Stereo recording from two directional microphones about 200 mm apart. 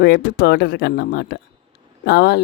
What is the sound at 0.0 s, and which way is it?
Speech, 55° left (ahead or behind).